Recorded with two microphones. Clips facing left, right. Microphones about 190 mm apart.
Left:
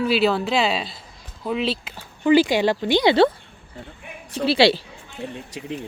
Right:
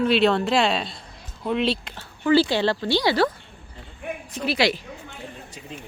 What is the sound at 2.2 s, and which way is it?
Speech, 15° left (ahead or behind).